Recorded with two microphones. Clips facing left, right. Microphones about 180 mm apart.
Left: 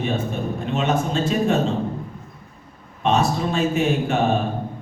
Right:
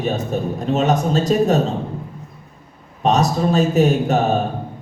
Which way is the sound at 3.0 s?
40° right (ahead or behind).